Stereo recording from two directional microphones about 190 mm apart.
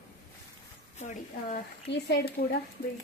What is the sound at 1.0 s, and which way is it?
Speech, 40° left (ahead or behind).